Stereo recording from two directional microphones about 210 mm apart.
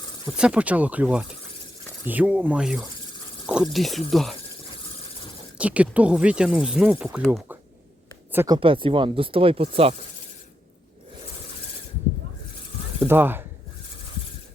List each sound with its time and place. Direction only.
0.3 s speech: 5° right (ahead or behind)
5.5 s speech: 5° right (ahead or behind)
8.3 s speech: 10° right (ahead or behind)
8.5 s speech: 25° right (ahead or behind)
13.0 s speech: 10° right (ahead or behind)